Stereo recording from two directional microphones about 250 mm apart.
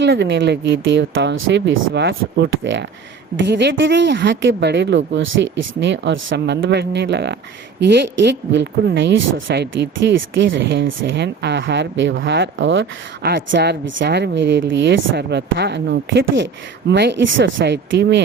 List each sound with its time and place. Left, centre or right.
0.0 s speech: right